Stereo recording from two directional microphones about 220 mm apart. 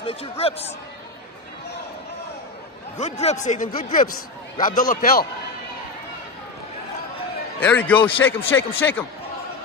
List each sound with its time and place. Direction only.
0.0 s speech: 25° left (ahead or behind)
3.0 s a man's voice: 30° left (ahead or behind)
7.6 s speech: 5° left (ahead or behind)